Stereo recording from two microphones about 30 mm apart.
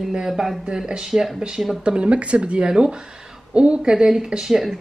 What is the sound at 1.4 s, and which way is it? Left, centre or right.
Speech, right.